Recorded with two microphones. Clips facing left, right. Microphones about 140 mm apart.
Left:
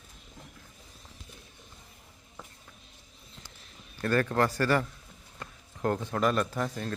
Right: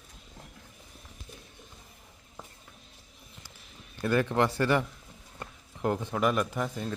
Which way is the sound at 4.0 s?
15° right (ahead or behind).